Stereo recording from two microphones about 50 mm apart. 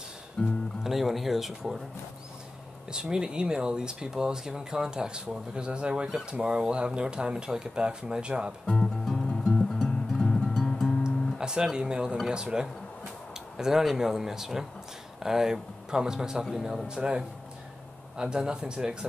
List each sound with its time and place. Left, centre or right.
0.4 s speech: centre
0.8 s speech: centre
2.9 s speech: centre
8.6 s music: centre
11.1 s speech: centre